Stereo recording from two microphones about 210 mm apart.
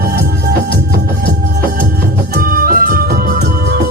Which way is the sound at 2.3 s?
45° right (ahead or behind).